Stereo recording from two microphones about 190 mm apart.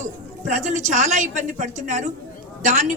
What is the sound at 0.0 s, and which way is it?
A woman's voice, 40° right (ahead or behind).